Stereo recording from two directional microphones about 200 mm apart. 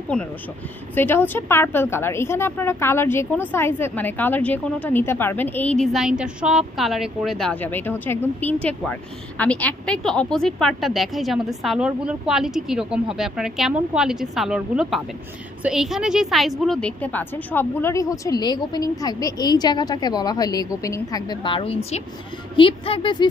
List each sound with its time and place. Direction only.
0.9 s a woman's voice: 10° left (ahead or behind); by 23.2 s 25° left (ahead or behind)